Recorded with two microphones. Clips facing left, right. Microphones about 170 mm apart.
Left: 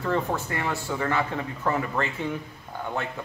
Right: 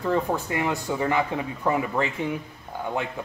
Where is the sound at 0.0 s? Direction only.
10° right (ahead or behind).